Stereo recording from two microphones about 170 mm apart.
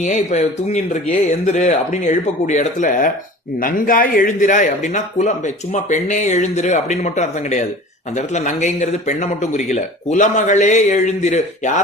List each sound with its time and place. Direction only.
0.0 s a man's voice: 45° left (ahead or behind)